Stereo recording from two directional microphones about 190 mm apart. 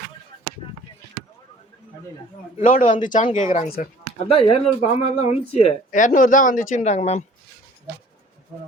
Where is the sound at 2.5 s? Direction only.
45° left (ahead or behind).